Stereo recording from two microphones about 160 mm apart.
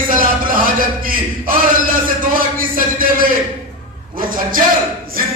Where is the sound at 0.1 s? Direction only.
60° right (ahead or behind).